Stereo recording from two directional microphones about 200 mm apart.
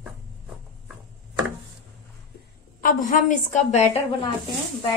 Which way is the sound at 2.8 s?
40° left (ahead or behind).